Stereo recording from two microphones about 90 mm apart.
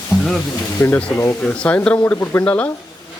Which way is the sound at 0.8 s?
25° left (ahead or behind).